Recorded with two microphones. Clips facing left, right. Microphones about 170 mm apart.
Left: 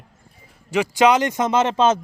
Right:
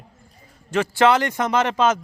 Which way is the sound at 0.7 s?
15° left (ahead or behind).